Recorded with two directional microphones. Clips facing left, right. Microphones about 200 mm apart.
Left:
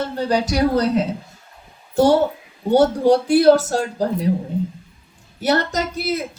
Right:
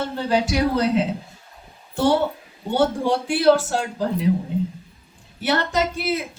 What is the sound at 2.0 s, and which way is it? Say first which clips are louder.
Speech: left 4 dB; 40° left (ahead or behind).